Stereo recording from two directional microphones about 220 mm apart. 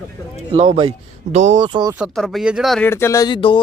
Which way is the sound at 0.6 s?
25° right (ahead or behind).